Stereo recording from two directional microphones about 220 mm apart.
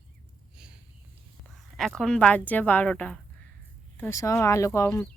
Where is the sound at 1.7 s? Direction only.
Centre (ahead or behind).